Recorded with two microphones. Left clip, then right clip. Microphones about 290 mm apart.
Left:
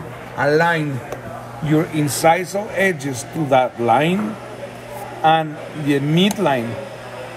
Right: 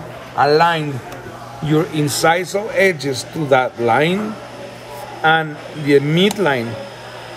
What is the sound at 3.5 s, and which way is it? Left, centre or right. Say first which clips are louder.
Speech: right 1 dB; right.